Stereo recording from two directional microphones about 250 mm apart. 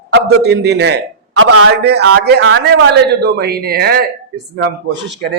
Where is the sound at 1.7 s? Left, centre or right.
Right.